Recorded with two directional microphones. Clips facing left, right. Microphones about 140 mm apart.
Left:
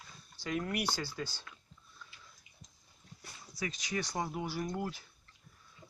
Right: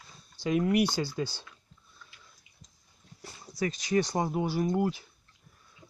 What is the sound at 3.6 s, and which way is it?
Speech, 35° right (ahead or behind).